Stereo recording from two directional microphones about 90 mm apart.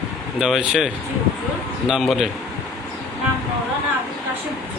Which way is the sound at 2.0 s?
Centre (ahead or behind).